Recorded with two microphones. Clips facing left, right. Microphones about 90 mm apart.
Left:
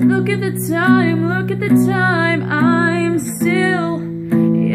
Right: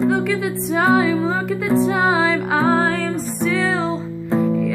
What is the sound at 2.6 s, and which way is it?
Music, centre (ahead or behind).